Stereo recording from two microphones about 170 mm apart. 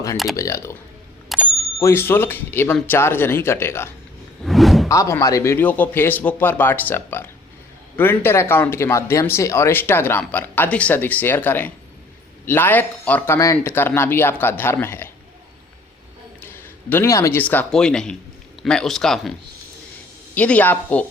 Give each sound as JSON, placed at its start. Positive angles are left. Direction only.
{"t": 0.3, "sound": "speech", "side_deg": 20}
{"t": 4.4, "sound": "a sound", "side_deg": 0}
{"t": 4.9, "sound": "speech", "side_deg": 20}
{"t": 16.4, "sound": "speech", "side_deg": 10}
{"t": 20.3, "sound": "speech", "side_deg": 10}